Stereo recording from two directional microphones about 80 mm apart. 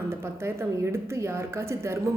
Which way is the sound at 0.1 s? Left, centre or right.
Right.